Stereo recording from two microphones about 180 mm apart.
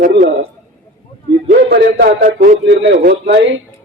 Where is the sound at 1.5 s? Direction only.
55° right (ahead or behind).